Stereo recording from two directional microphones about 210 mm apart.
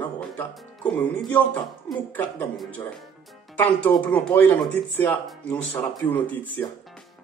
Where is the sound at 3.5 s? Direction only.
10° left (ahead or behind).